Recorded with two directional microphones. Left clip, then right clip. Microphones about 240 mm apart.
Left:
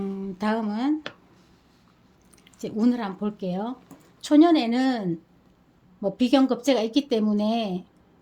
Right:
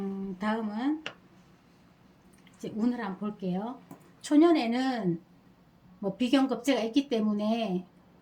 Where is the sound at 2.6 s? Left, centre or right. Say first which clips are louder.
Left 7 dB; left.